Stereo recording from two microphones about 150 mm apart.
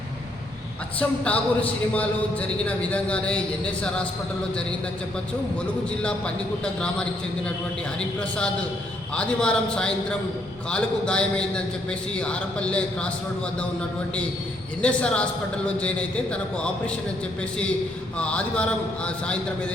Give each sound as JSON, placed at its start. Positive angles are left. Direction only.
{"t": 0.9, "sound": "a man's voice", "side_deg": 10}
{"t": 6.0, "sound": "a man's voice", "side_deg": 5}
{"t": 14.8, "sound": "a man's voice", "side_deg": 5}
{"t": 18.2, "sound": "a man's voice", "side_deg": 5}